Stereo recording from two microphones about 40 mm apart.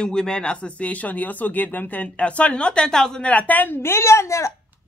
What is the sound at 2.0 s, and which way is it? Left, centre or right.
Speech, left.